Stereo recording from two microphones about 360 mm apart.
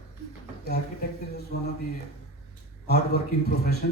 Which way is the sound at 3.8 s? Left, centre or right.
Left.